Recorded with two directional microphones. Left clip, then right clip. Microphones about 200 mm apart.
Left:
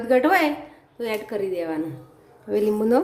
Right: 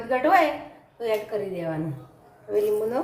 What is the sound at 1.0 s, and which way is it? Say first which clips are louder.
Speech: even; 50° left (ahead or behind).